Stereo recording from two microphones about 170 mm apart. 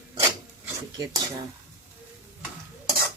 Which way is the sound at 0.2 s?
20° right (ahead or behind).